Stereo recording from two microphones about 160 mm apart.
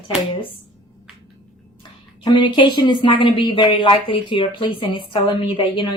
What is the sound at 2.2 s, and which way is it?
Speech, 30° left (ahead or behind).